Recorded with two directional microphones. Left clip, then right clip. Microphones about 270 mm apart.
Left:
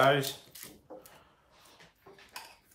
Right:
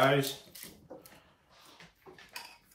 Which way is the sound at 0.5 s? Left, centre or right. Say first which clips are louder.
Left 1 dB; centre.